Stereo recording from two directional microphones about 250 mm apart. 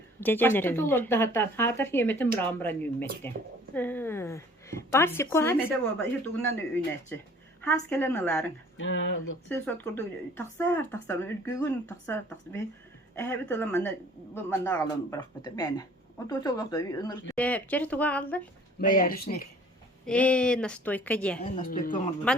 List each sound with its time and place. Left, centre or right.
0.2 s speech: centre
8.8 s speech: left
9.5 s speech: centre
18.8 s speech: left
20.1 s a woman's voice: centre
21.7 s speech: left